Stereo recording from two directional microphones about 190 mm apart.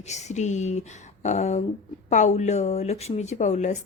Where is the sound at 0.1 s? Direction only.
35° left (ahead or behind).